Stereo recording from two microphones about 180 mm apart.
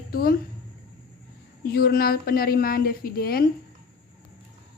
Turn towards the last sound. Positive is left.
turn(degrees=55)  # may be behind; listen again after turning